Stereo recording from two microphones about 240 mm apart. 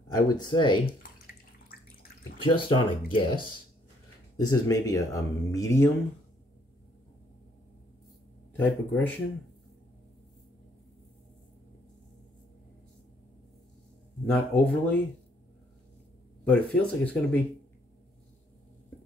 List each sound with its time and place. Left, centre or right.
0.1 s speech: centre
2.4 s speech: centre
8.5 s speech: centre
14.2 s speech: centre
16.4 s speech: centre